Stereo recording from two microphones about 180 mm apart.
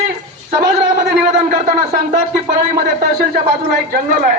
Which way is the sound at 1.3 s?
40° right (ahead or behind).